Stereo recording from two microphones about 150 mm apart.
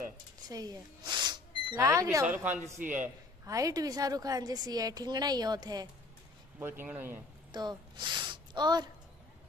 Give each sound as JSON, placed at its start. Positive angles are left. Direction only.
{"t": 0.5, "sound": "a woman's voice", "side_deg": -25}
{"t": 6.6, "sound": "speech", "side_deg": -15}
{"t": 7.5, "sound": "speech", "side_deg": -30}